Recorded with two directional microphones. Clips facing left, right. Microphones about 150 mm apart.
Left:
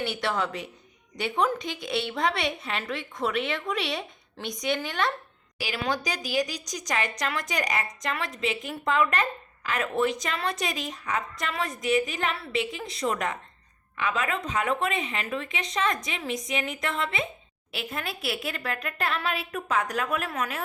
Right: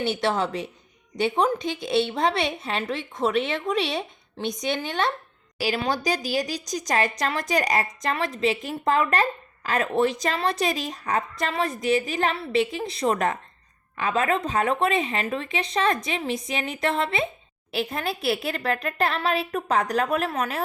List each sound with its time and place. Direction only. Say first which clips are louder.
0.0 s a woman's voice: right 4 dB; 25° right (ahead or behind)